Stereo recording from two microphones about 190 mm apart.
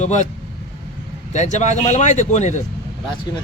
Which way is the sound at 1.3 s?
40° left (ahead or behind).